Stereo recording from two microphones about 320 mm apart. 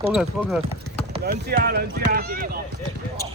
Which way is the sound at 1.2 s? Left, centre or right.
Right.